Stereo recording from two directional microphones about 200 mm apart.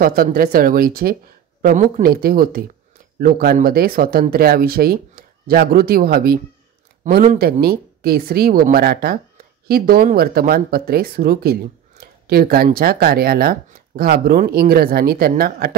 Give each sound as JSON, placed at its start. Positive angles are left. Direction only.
{"t": 0.0, "sound": "speech", "side_deg": -45}
{"t": 7.0, "sound": "speech", "side_deg": -40}
{"t": 7.6, "sound": "speech", "side_deg": -50}